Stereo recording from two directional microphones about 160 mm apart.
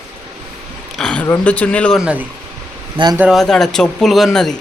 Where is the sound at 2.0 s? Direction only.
5° right (ahead or behind).